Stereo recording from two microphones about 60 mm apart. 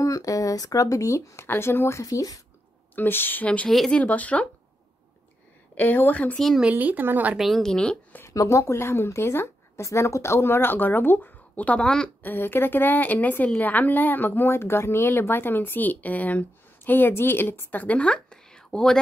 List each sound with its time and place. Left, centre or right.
0.0 s speech: left
2.0 s speech: left
3.0 s a woman's voice: left
3.4 s speech: left
5.8 s a woman's voice: left
6.3 s speech: centre
6.7 s speech: right
7.3 s speech: centre
7.6 s speech: centre
8.3 s speech: left
9.8 s a woman's voice: left
12.2 s a woman's voice: left; by 18.9 s centre